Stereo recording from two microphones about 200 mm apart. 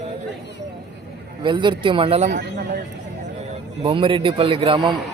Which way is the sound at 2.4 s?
55° right (ahead or behind).